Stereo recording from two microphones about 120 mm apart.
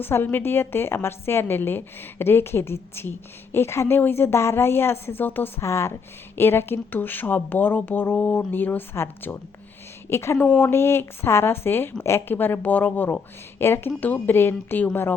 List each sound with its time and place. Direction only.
0.0 s a woman's voice: 15° left (ahead or behind)
10.3 s a woman's voice: 10° left (ahead or behind)